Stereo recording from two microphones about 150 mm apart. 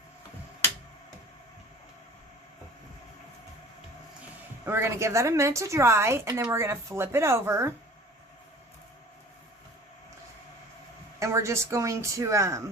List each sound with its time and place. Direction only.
4.6 s a woman's voice: 15° right (ahead or behind)
11.2 s a woman's voice: 20° right (ahead or behind)